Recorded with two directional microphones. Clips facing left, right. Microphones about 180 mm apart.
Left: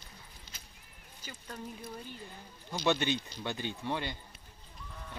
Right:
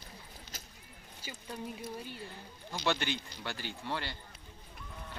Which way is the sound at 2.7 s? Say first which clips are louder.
Left 3 dB; 20° left (ahead or behind).